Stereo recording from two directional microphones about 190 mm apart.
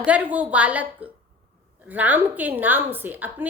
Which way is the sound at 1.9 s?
10° right (ahead or behind).